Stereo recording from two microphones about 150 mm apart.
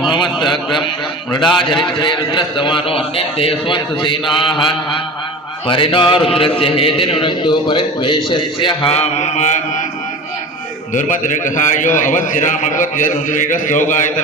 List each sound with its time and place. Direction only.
0.1 s a man's voice: 30° left (ahead or behind)
0.5 s a man's voice: centre (ahead or behind)
2.0 s a man's voice: 30° left (ahead or behind); by 9.8 s 50° left (ahead or behind)
10.9 s a man's voice: 60° left (ahead or behind)